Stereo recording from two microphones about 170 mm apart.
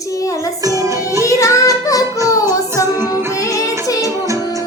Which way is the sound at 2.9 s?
15° right (ahead or behind).